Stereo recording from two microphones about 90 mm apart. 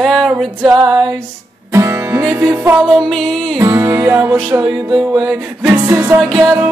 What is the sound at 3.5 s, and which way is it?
Music, 40° right (ahead or behind).